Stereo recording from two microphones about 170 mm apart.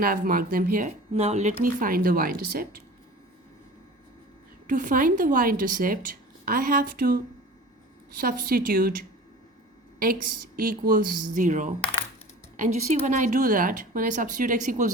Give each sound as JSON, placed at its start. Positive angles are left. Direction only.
{"t": 0.0, "sound": "a woman's voice", "side_deg": -60}
{"t": 1.1, "sound": "a woman's voice", "side_deg": -40}
{"t": 4.6, "sound": "a woman's voice", "side_deg": -50}